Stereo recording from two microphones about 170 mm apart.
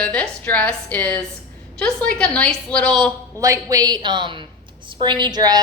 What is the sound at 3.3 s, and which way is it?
A woman's voice, 20° right (ahead or behind).